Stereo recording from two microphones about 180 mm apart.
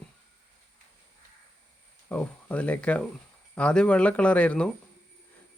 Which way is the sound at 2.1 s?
10° left (ahead or behind).